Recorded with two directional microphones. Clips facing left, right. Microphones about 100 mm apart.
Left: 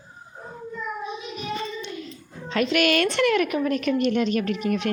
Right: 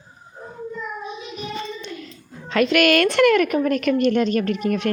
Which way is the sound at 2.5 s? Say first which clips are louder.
Right 4 dB; 60° right (ahead or behind).